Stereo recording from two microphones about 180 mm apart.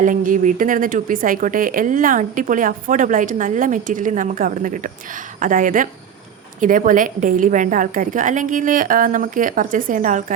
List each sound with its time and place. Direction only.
0.0 s speech: 45° right (ahead or behind)